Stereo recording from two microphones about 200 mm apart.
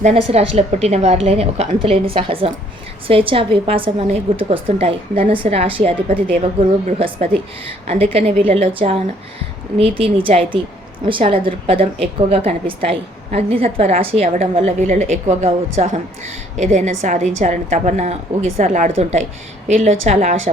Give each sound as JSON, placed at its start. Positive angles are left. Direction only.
{"t": 0.0, "sound": "a woman's voice", "side_deg": -30}